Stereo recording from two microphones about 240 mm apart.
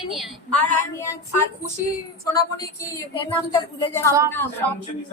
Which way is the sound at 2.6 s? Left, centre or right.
Centre.